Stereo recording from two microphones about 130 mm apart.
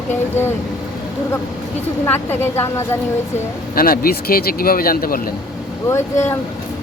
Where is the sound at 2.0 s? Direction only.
15° left (ahead or behind).